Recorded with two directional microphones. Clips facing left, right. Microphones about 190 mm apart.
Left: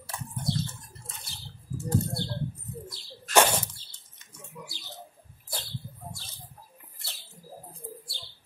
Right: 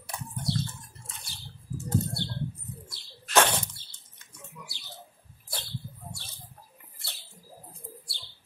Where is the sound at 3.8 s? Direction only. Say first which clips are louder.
Even; 60° right (ahead or behind).